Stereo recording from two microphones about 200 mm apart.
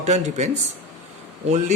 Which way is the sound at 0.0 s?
35° right (ahead or behind).